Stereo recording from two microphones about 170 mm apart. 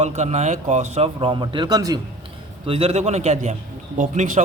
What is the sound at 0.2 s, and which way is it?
A man's voice, 40° right (ahead or behind).